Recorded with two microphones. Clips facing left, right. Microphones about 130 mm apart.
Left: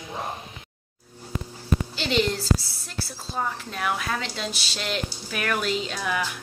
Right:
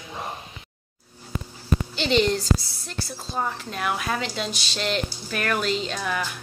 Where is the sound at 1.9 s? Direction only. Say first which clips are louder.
Right 4 dB; centre (ahead or behind).